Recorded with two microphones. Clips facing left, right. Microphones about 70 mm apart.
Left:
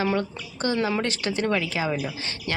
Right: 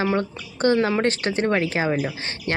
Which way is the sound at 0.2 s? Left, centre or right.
Right.